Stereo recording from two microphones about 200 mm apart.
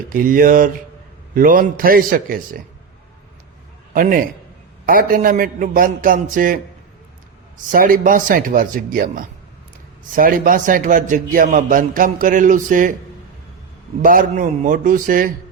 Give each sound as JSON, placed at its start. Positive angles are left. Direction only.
{"t": 0.1, "sound": "a man's voice", "side_deg": -45}
{"t": 3.9, "sound": "a man's voice", "side_deg": -45}
{"t": 7.7, "sound": "a man's voice", "side_deg": -45}
{"t": 14.0, "sound": "a man's voice", "side_deg": -40}